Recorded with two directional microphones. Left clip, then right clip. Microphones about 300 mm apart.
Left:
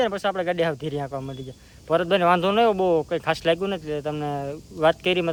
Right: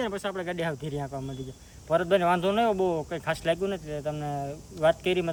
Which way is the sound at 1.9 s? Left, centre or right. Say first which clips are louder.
Left 4 dB; centre.